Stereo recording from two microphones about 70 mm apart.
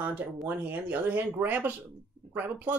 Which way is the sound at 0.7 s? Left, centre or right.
Right.